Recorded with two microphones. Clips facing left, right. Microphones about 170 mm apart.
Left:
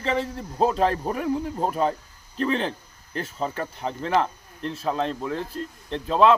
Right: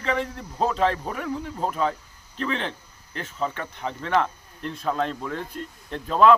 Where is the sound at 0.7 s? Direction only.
40° left (ahead or behind).